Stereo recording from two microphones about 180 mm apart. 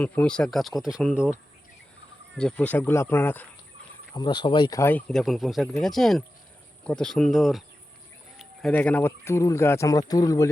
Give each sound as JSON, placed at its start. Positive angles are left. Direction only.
{"t": 0.0, "sound": "speech", "side_deg": 5}
{"t": 2.4, "sound": "speech", "side_deg": 5}
{"t": 4.1, "sound": "speech", "side_deg": 25}
{"t": 8.7, "sound": "speech", "side_deg": 10}